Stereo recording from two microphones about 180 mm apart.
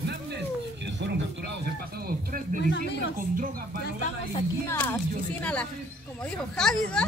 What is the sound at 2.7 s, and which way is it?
Speech, 75° left (ahead or behind).